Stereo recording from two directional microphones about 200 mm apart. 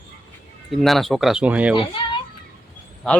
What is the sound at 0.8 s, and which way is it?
Speech, centre (ahead or behind).